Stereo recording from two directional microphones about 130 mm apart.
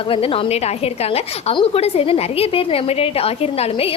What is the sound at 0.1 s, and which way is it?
A woman's voice, 45° left (ahead or behind).